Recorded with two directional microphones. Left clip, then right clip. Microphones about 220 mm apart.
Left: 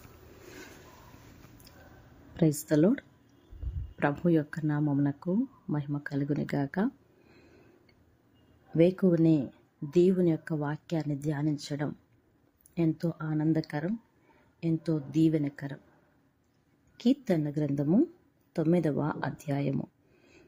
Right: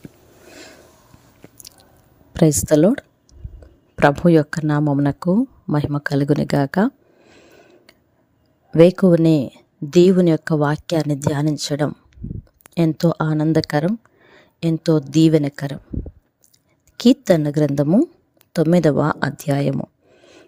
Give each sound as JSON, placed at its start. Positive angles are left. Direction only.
{"t": 2.3, "sound": "speech", "side_deg": -45}
{"t": 17.0, "sound": "speech", "side_deg": -50}